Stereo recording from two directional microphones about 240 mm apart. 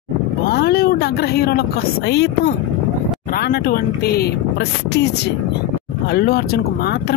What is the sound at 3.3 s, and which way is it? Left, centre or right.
Speech, left.